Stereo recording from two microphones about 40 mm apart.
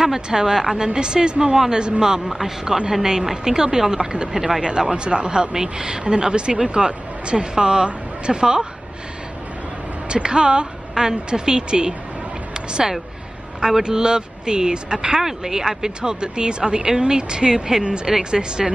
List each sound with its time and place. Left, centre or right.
0.0 s speech: centre
4.6 s speech: right
10.0 s a woman's voice: right